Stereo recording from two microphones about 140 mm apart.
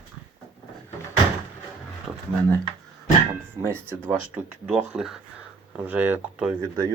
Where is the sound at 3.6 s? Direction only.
15° right (ahead or behind).